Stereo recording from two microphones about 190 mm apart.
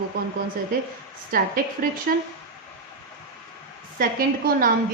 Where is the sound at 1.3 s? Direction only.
50° right (ahead or behind).